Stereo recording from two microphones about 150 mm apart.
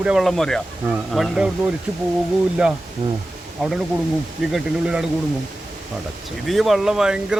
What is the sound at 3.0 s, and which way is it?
Speech, 35° right (ahead or behind).